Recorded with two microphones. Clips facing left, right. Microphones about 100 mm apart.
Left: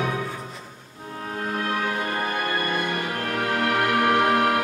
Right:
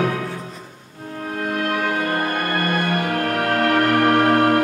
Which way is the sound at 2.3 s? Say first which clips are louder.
Right 4 dB; 60° right (ahead or behind).